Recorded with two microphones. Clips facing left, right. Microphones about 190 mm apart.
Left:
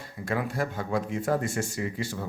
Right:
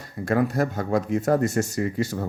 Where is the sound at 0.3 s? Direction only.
45° right (ahead or behind).